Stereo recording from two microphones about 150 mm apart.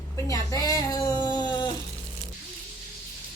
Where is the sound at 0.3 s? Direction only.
20° left (ahead or behind).